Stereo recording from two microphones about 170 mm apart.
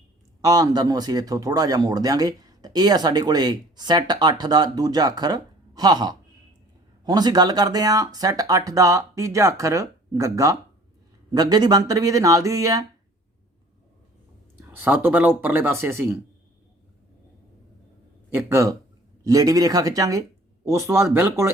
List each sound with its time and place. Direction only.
0.4 s speech: 20° right (ahead or behind)
14.7 s speech: 10° right (ahead or behind)
18.3 s speech: 15° right (ahead or behind)